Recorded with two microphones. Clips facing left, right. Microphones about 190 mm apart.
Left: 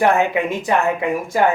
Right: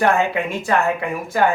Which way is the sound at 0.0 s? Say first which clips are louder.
Left 2 dB; 15° left (ahead or behind).